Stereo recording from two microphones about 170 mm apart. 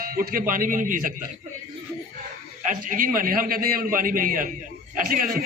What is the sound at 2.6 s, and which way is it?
A man's voice, 50° right (ahead or behind).